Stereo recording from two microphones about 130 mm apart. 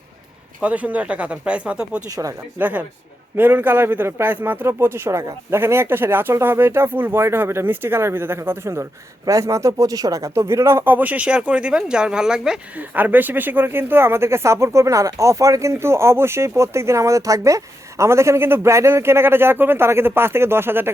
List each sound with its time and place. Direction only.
0.6 s speech: 10° right (ahead or behind)
2.0 s a man's voice: 25° right (ahead or behind)
2.6 s a man's voice: 10° right (ahead or behind)